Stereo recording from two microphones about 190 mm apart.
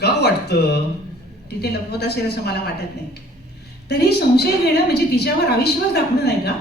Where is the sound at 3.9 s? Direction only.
60° left (ahead or behind).